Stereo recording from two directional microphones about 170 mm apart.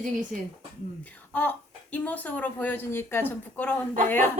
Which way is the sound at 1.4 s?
10° left (ahead or behind).